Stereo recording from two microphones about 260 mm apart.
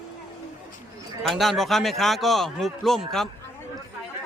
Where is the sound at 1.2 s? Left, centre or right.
Centre.